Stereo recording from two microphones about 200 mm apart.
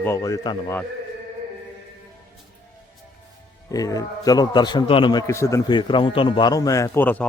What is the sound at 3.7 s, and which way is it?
A man's voice, 20° left (ahead or behind).